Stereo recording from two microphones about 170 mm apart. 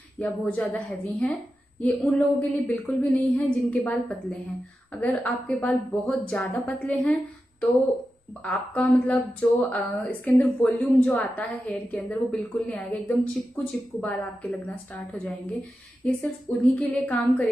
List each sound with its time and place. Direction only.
0.2 s speech: 10° left (ahead or behind)
8.4 s speech: 10° left (ahead or behind)